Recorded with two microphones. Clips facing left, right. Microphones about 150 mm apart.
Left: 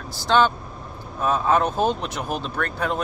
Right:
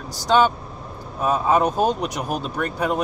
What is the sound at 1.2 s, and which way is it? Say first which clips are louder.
Speech: right 1 dB; 10° right (ahead or behind).